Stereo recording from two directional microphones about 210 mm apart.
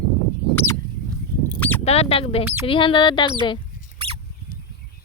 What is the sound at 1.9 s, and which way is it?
Speech, 30° left (ahead or behind).